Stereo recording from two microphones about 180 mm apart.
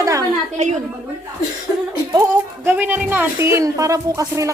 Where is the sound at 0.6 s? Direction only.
40° right (ahead or behind).